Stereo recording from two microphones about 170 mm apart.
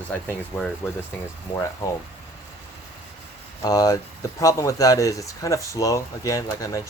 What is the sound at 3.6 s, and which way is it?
Speech, 20° left (ahead or behind).